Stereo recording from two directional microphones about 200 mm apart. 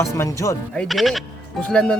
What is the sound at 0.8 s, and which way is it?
Speech, centre (ahead or behind).